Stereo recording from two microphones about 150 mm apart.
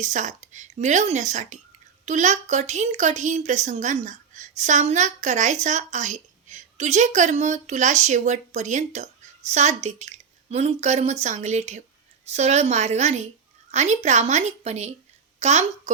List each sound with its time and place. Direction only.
0.0 s a woman's voice: 55° right (ahead or behind)